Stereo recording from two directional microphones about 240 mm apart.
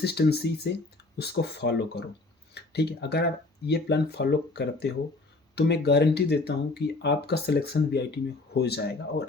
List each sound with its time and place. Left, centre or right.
0.0 s speech: left